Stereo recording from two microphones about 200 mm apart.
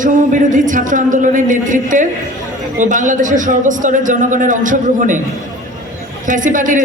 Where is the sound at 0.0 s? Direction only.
40° right (ahead or behind).